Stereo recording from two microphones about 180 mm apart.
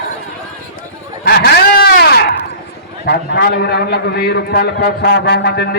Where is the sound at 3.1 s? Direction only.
60° left (ahead or behind).